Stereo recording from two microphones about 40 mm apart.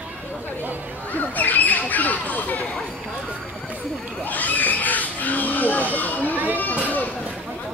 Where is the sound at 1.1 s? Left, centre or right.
Left.